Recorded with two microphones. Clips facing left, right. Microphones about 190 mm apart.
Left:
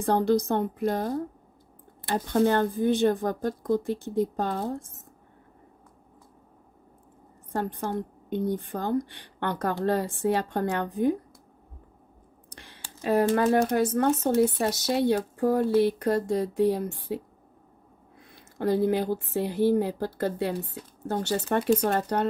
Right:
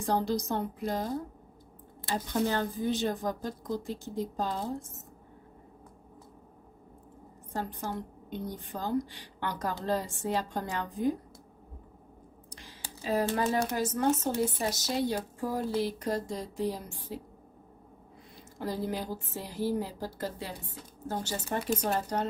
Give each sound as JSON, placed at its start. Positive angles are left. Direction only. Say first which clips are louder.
{"t": 0.0, "sound": "speech", "louder": "left 6 dB", "side_deg": 55}
{"t": 7.5, "sound": "speech", "louder": "left 6 dB", "side_deg": 60}
{"t": 12.4, "sound": "a sound", "louder": "left 1 dB", "side_deg": 60}
{"t": 13.7, "sound": "speech", "louder": "left 5 dB", "side_deg": 60}
{"t": 18.3, "sound": "speech", "louder": "left 10 dB", "side_deg": 60}